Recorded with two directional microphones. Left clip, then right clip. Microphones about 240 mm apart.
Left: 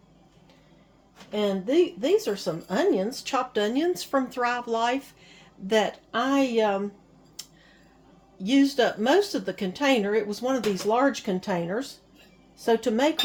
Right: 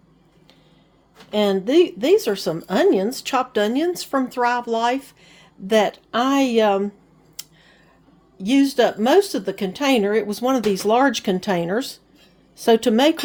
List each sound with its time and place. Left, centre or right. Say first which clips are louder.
1.3 s a woman's voice: right 7 dB; right
7.4 s scissors: right 4 dB; right
8.4 s a woman's voice: right 5 dB; right